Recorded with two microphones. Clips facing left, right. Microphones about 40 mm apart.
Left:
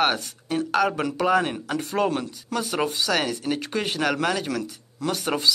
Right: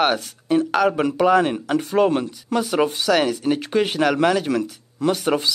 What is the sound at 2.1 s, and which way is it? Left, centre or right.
Speech, right.